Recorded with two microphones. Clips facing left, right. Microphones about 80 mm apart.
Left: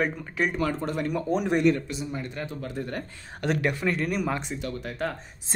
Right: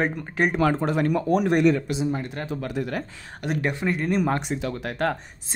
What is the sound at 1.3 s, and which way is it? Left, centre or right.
Speech, right.